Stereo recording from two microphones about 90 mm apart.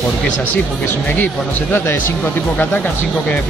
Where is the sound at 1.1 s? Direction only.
20° left (ahead or behind).